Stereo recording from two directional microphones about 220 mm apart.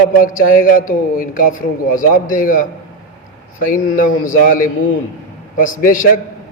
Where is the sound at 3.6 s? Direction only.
40° left (ahead or behind).